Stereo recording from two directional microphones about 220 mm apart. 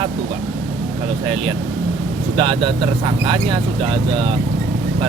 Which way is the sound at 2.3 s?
25° right (ahead or behind).